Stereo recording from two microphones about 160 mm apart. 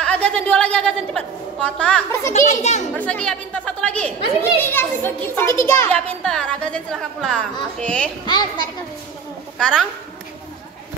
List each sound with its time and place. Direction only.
0.0 s a sound: 10° left (ahead or behind)
0.5 s a woman's voice: 5° left (ahead or behind)
2.6 s a child's voice: 45° left (ahead or behind)
3.0 s a child's voice: 5° left (ahead or behind)
5.9 s a woman's voice: 5° left (ahead or behind)
8.3 s a woman's voice: 25° left (ahead or behind)
9.6 s a woman's voice: 5° left (ahead or behind)